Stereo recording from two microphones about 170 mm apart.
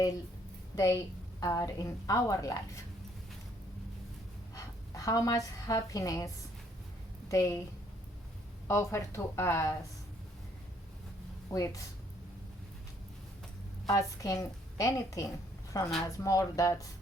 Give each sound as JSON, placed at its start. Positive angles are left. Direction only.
{"t": 0.8, "sound": "a woman's voice", "side_deg": 20}
{"t": 4.5, "sound": "a woman's voice", "side_deg": 20}
{"t": 8.6, "sound": "speech", "side_deg": 15}
{"t": 11.5, "sound": "a woman's voice", "side_deg": 20}
{"t": 13.9, "sound": "a woman's voice", "side_deg": 20}